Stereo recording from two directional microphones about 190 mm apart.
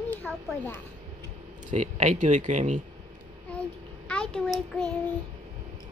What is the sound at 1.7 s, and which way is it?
Speech, 40° right (ahead or behind).